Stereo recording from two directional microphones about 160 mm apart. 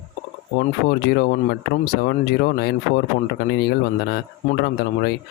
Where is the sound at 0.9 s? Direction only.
75° left (ahead or behind).